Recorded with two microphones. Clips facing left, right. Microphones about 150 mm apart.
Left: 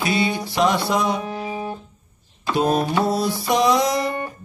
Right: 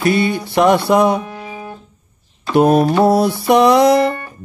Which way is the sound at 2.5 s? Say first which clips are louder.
Right 8 dB; 60° right (ahead or behind).